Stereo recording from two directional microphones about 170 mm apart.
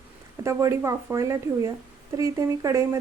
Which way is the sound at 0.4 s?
15° right (ahead or behind).